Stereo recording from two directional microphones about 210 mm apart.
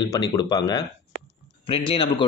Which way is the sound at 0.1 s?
20° left (ahead or behind).